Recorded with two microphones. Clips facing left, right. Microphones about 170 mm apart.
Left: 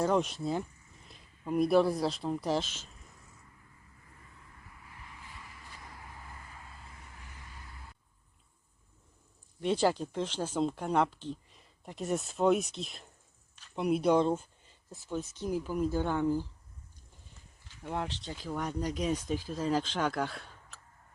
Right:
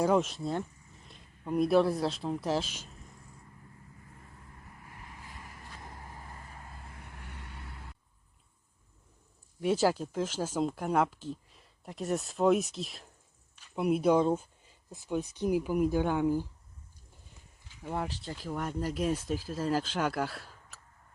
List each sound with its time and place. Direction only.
0.0 s speech: 5° right (ahead or behind)
5.0 s vehicle: 45° right (ahead or behind)
6.7 s vehicle: 55° right (ahead or behind)
9.6 s speech: 5° right (ahead or behind)
17.8 s speech: 5° right (ahead or behind)